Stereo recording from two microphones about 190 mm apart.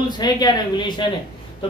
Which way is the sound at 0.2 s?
20° left (ahead or behind).